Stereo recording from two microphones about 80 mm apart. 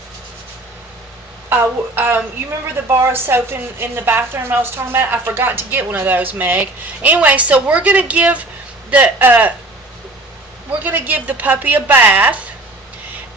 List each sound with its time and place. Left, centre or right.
2.0 s a woman's voice: right
10.7 s a woman's voice: right